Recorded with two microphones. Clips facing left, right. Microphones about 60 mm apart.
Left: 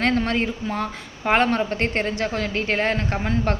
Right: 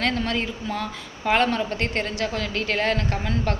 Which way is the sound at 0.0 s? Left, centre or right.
Left.